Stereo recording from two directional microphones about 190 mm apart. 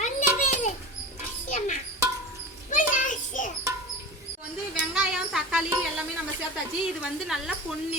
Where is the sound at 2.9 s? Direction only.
40° left (ahead or behind).